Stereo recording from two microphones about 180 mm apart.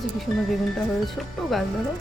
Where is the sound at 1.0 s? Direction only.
Centre (ahead or behind).